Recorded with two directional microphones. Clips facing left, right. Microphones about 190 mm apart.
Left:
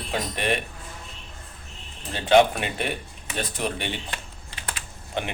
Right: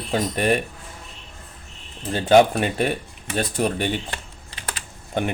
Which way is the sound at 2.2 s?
40° right (ahead or behind).